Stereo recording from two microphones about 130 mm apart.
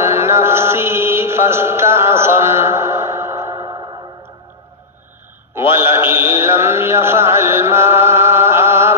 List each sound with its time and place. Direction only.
0.0 s chant: 20° right (ahead or behind)
5.8 s a sound: 15° right (ahead or behind)
6.1 s chant: 20° right (ahead or behind)